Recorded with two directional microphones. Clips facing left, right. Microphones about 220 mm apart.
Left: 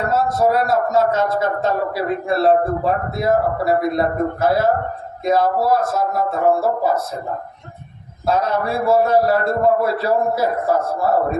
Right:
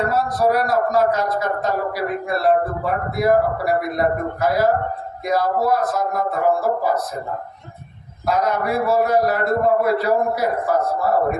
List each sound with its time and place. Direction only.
0.1 s a man's voice: 25° left (ahead or behind)
8.3 s a man's voice: 30° left (ahead or behind)